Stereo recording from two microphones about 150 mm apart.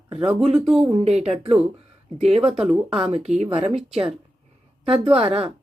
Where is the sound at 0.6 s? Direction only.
5° right (ahead or behind).